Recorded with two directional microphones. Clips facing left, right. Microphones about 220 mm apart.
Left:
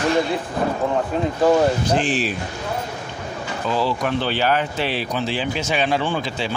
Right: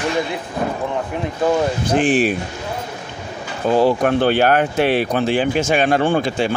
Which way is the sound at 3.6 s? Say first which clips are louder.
Right 7 dB; 50° right (ahead or behind).